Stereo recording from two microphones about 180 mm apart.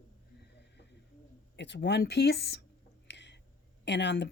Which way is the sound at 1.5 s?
75° left (ahead or behind).